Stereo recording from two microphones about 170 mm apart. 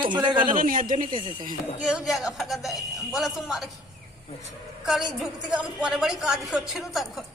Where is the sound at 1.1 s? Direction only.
30° right (ahead or behind).